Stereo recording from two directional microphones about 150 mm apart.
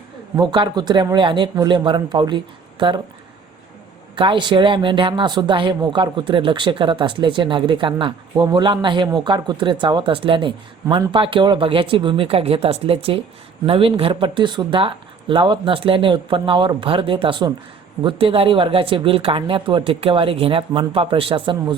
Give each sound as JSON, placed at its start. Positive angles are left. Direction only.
{"t": 0.3, "sound": "speech", "side_deg": -30}
{"t": 4.1, "sound": "speech", "side_deg": -35}